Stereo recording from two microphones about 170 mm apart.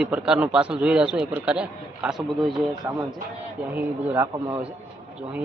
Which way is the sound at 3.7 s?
10° right (ahead or behind).